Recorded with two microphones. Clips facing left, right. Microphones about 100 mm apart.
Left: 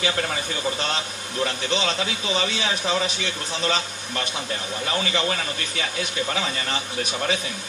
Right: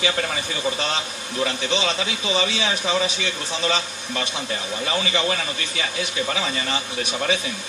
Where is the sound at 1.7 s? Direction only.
15° right (ahead or behind).